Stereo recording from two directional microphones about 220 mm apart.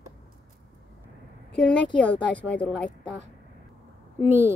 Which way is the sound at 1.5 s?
5° left (ahead or behind).